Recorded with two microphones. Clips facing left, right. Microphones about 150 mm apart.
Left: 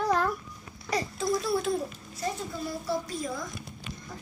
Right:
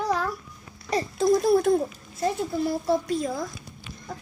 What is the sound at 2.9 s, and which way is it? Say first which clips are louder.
Speech: right 4 dB; 60° right (ahead or behind).